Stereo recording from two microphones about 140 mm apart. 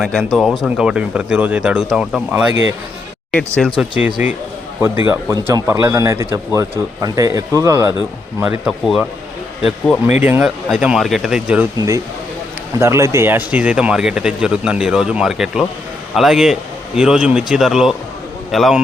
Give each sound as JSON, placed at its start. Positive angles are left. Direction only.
{"t": 0.0, "sound": "speech", "side_deg": 0}
{"t": 3.3, "sound": "speech", "side_deg": 5}
{"t": 3.8, "sound": "speech", "side_deg": -10}
{"t": 8.4, "sound": "speech", "side_deg": -5}
{"t": 10.2, "sound": "speech", "side_deg": -10}
{"t": 12.8, "sound": "speech", "side_deg": -20}